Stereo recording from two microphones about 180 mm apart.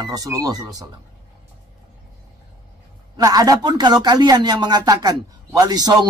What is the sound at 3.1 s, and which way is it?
Speech, 20° right (ahead or behind).